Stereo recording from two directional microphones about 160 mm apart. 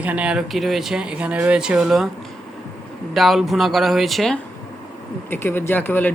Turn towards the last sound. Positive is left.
turn(degrees=10)  # may be behind; listen again after turning